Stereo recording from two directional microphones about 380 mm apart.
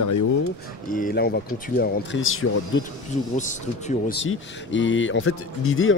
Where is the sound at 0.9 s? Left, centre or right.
Left.